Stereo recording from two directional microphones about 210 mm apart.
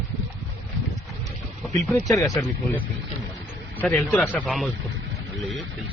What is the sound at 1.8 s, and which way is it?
Speech, 5° left (ahead or behind).